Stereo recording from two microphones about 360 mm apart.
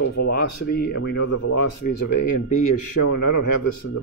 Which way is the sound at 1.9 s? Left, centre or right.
Left.